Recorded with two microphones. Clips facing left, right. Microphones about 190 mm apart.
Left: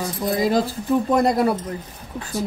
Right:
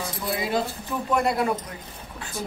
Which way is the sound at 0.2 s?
40° left (ahead or behind).